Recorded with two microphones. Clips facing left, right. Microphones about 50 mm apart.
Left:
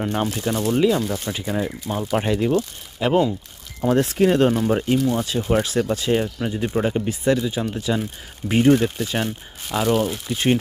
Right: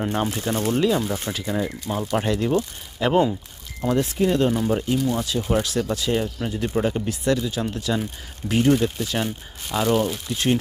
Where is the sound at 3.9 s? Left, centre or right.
Left.